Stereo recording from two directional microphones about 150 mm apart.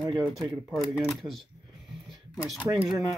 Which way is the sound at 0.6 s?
5° right (ahead or behind).